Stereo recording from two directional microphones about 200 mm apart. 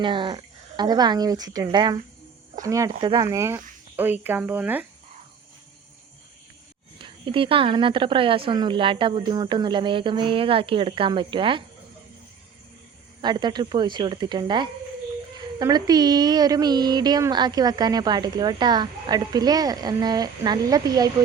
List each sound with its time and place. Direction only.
0.0 s a woman's voice: 25° right (ahead or behind); by 4.9 s 10° right (ahead or behind)
7.0 s a woman's voice: 25° right (ahead or behind)
13.2 s a woman's voice: 20° right (ahead or behind)